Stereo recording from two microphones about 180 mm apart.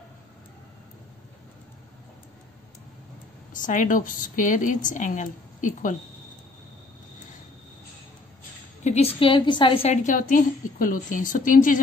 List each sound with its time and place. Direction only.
3.5 s speech: 45° left (ahead or behind)
8.8 s a woman's voice: 35° left (ahead or behind)
10.0 s speech: 45° left (ahead or behind)